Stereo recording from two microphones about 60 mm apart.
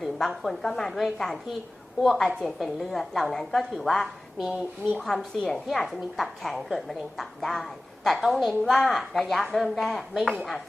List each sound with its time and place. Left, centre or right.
0.0 s a woman's voice: centre
4.4 s speech: centre
4.9 s a woman's voice: centre
5.6 s a woman's voice: centre